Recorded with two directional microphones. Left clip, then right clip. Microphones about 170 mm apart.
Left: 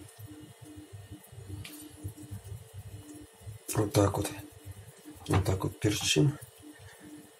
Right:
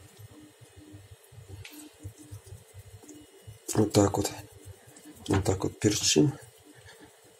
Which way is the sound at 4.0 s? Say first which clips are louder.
Right 2 dB; 35° right (ahead or behind).